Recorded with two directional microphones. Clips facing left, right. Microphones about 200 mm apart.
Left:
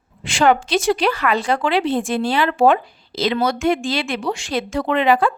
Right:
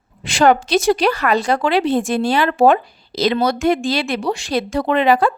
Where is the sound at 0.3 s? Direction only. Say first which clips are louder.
Right 2 dB; 40° right (ahead or behind).